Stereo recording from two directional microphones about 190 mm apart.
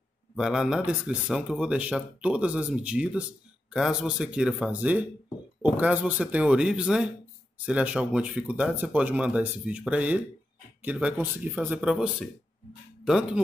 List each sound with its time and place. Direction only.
0.4 s speech: 5° right (ahead or behind)